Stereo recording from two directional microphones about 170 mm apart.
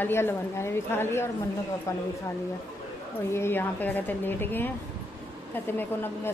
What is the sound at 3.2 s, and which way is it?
A woman's voice, 15° left (ahead or behind).